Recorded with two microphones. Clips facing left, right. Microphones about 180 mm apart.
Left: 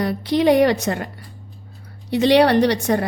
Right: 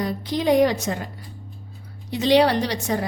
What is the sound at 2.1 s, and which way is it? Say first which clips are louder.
Speech: left 3 dB; 65° left (ahead or behind).